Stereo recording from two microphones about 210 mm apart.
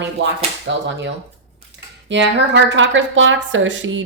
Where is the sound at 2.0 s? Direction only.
60° right (ahead or behind).